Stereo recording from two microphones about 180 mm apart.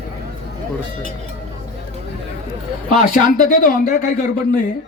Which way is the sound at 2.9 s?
45° left (ahead or behind).